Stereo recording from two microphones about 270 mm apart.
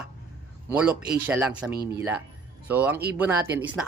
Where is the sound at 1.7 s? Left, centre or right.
Right.